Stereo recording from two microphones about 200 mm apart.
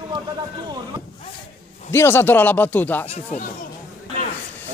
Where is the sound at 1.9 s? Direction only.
10° left (ahead or behind).